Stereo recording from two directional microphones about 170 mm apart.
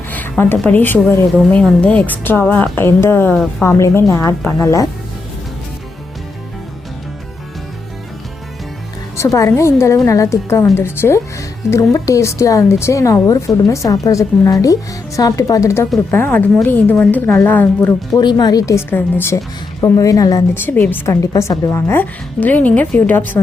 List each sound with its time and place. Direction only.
0.1 s speech: 10° left (ahead or behind)
9.1 s speech: 15° left (ahead or behind)
18.2 s speech: 25° left (ahead or behind)